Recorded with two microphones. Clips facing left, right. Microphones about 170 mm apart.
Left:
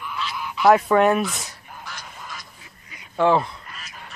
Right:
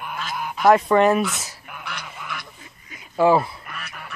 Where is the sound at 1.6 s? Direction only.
65° right (ahead or behind).